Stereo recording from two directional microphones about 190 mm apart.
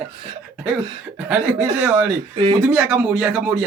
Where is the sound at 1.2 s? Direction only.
10° right (ahead or behind).